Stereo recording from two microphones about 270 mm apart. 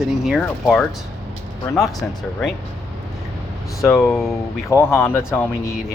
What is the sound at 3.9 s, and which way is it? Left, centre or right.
Speech, centre.